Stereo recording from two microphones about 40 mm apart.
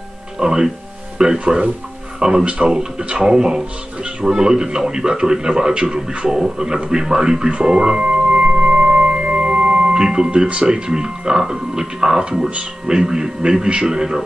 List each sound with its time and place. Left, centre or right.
0.4 s a man's voice: centre
7.6 s music: centre
10.0 s speech: centre